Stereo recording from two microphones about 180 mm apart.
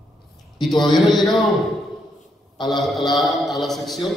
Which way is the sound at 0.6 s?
Centre (ahead or behind).